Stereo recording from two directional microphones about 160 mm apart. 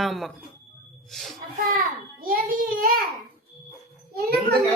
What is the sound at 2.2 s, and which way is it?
Speech, 60° right (ahead or behind).